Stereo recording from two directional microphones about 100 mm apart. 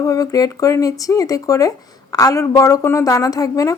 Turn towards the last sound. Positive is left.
turn(degrees=35)  # may be behind; listen again after turning